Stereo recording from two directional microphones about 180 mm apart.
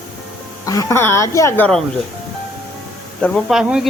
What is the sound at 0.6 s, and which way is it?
A woman's voice, 20° left (ahead or behind).